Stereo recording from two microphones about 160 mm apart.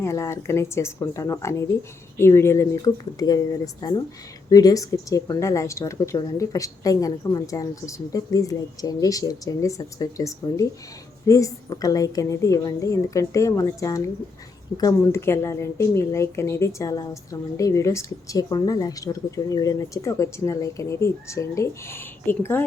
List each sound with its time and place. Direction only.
0.0 s a woman's voice: 20° left (ahead or behind)